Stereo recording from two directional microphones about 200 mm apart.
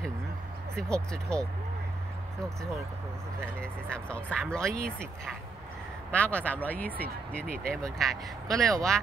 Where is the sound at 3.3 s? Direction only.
5° left (ahead or behind).